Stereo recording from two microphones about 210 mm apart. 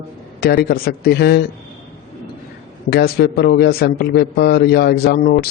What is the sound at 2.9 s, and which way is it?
A man's voice, 50° left (ahead or behind).